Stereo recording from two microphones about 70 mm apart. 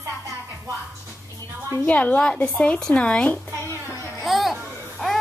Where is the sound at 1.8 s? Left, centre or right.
Left.